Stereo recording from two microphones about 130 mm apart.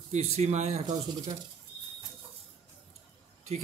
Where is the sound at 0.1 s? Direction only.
55° right (ahead or behind).